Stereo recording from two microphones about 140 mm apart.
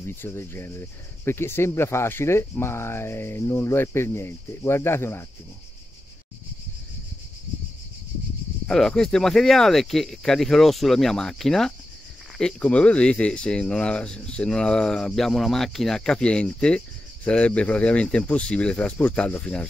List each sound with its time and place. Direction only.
0.0 s speech: 15° left (ahead or behind)
8.6 s speech: 5° left (ahead or behind)